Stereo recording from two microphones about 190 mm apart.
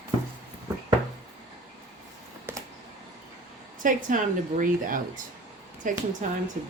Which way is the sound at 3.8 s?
45° right (ahead or behind).